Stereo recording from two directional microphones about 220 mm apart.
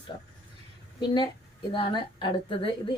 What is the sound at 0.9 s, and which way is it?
A woman's voice, 20° left (ahead or behind).